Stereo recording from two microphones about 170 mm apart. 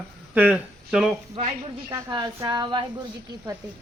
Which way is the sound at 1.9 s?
25° right (ahead or behind).